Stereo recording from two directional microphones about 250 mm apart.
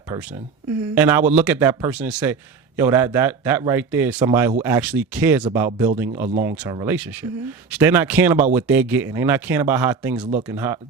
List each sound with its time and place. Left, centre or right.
0.2 s a man's voice: centre